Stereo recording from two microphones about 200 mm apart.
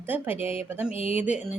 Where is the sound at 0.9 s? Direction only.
30° left (ahead or behind).